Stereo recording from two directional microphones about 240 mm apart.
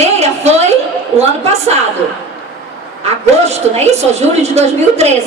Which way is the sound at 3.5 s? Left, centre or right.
Right.